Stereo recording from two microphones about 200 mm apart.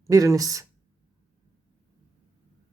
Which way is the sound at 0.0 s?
15° right (ahead or behind).